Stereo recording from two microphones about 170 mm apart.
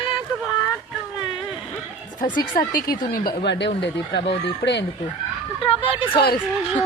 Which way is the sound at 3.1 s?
75° left (ahead or behind).